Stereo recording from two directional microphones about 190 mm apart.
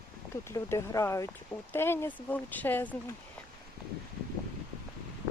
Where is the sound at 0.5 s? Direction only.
15° left (ahead or behind).